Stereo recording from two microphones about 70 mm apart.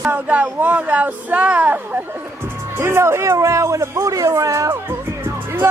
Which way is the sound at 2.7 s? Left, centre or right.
Right.